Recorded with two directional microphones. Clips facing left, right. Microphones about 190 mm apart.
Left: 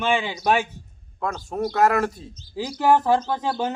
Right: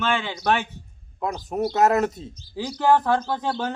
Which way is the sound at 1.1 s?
20° right (ahead or behind).